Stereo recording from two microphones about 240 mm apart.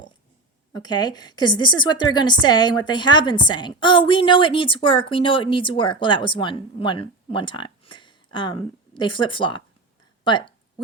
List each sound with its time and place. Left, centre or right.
0.8 s a woman's voice: centre